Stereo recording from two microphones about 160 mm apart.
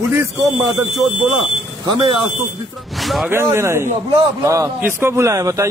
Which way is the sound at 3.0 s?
Centre (ahead or behind).